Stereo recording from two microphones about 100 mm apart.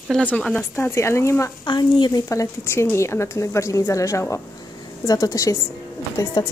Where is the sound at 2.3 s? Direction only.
30° left (ahead or behind).